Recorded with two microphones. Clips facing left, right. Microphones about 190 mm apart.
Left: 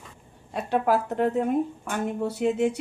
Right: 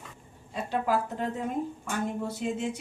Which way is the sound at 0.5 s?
65° left (ahead or behind).